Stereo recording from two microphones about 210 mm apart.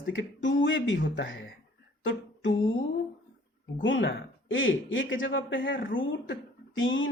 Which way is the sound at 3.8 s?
65° left (ahead or behind).